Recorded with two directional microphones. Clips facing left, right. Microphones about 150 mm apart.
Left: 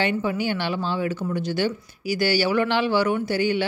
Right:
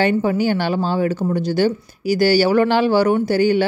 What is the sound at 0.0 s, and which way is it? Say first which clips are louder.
A man's voice: right 7 dB; 40° right (ahead or behind).